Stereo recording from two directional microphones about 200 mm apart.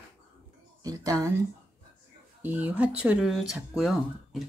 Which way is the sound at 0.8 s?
20° right (ahead or behind).